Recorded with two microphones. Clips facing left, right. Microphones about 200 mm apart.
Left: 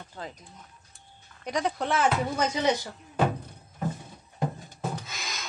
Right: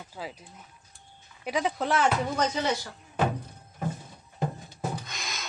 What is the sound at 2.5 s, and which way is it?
Speech, 20° left (ahead or behind).